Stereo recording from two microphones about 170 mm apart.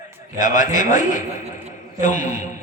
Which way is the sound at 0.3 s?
50° left (ahead or behind).